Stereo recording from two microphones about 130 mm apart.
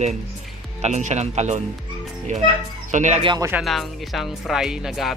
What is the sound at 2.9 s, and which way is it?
Speech, 65° right (ahead or behind).